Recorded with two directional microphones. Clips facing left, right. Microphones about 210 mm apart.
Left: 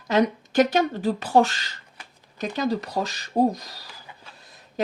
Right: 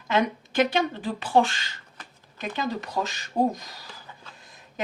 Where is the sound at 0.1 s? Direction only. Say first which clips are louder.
Left 4 dB; 40° left (ahead or behind).